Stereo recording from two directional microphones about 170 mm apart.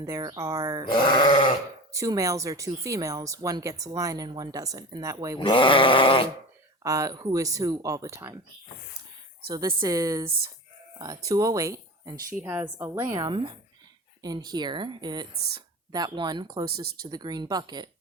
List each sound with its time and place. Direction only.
0.0 s speech: 20° right (ahead or behind)
0.9 s speech: 30° left (ahead or behind)
1.9 s speech: 20° right (ahead or behind)
5.4 s sheep: 30° left (ahead or behind)
6.8 s speech: 20° right (ahead or behind)
9.5 s a woman's voice: 20° right (ahead or behind)